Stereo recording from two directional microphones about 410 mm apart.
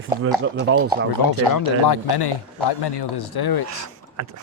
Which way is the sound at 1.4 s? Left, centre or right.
Left.